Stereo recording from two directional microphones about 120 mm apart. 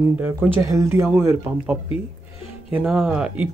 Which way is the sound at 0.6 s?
25° right (ahead or behind).